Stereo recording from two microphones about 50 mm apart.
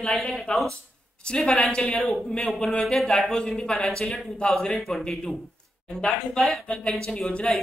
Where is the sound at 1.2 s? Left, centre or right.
Centre.